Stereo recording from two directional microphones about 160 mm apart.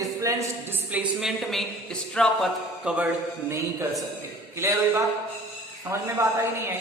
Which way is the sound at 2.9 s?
5° right (ahead or behind).